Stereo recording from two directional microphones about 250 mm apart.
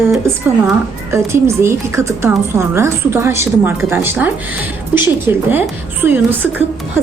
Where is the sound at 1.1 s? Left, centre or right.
Centre.